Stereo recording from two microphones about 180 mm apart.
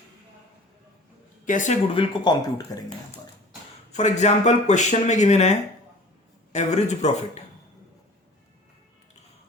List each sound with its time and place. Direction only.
1.5 s speech: 45° left (ahead or behind)
2.0 s speech: 25° left (ahead or behind)
3.9 s speech: 40° left (ahead or behind)